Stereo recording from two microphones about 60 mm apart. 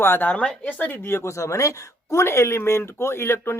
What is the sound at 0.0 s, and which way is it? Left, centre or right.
Speech, left.